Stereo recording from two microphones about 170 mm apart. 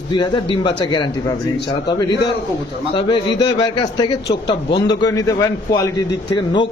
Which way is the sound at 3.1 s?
30° left (ahead or behind).